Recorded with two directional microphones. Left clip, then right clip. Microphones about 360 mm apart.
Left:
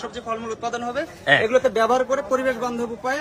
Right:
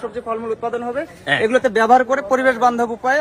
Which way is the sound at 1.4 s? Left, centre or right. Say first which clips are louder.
Right 4 dB; right.